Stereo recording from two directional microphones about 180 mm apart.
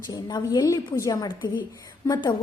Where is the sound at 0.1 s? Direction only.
20° left (ahead or behind).